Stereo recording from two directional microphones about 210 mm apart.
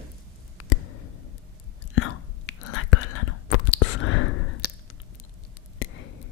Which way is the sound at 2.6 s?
90° left.